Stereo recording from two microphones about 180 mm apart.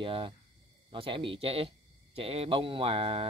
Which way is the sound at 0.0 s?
30° right (ahead or behind).